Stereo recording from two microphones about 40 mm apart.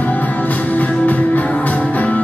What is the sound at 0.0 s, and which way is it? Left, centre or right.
Music, left.